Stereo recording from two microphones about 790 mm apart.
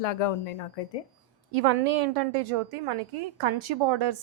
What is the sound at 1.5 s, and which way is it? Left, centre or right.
A woman's voice, right.